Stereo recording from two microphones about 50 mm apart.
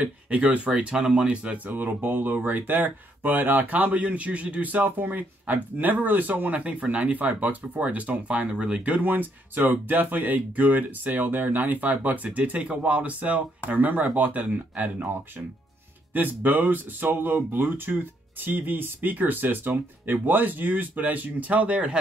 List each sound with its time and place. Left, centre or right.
0.0 s speech: right
1.7 s speech: right
16.1 s speech: right